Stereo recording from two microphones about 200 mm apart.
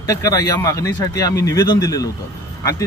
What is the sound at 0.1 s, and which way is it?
A man's voice, 15° left (ahead or behind).